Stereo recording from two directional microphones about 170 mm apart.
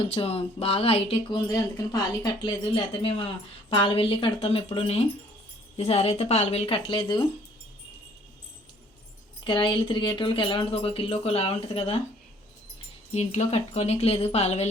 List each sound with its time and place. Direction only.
0.1 s speech: 35° left (ahead or behind)
9.4 s speech: 30° left (ahead or behind)
13.1 s speech: 40° left (ahead or behind)